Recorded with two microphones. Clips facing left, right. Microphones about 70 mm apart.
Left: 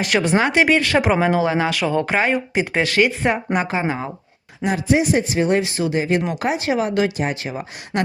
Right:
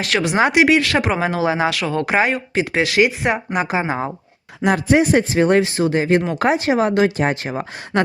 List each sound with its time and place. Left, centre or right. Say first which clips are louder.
0.0 s speech: left 1 dB; centre
0.3 s speech: right 3 dB; centre
0.6 s speech: right 1 dB; centre
1.7 s speech: left 1 dB; centre
2.0 s speech: right 2 dB; centre
2.3 s speech: even; centre
3.8 s speech: right 2 dB; right
4.6 s speech: right 3 dB; right
6.7 s speech: right 2 dB; right